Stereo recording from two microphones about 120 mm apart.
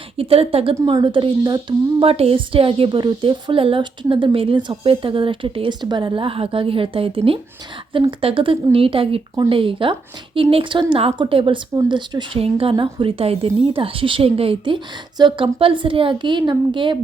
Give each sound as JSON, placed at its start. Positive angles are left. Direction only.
{"t": 0.2, "sound": "speech", "side_deg": -55}
{"t": 0.9, "sound": "speech", "side_deg": -40}
{"t": 11.7, "sound": "speech", "side_deg": -35}